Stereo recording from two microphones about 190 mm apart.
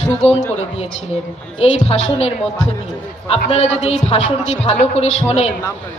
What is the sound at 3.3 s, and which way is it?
A woman's voice, 30° left (ahead or behind).